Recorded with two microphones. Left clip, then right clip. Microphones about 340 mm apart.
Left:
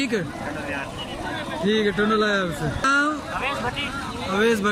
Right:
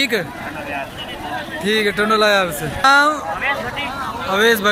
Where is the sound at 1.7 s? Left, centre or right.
Centre.